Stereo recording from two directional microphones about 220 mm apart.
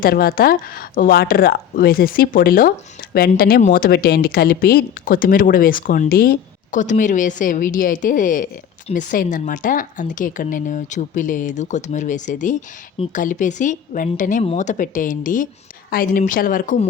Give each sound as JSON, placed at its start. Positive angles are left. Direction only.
{"t": 0.0, "sound": "speech", "side_deg": 40}